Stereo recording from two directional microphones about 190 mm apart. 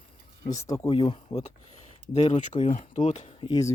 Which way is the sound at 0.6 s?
15° left (ahead or behind).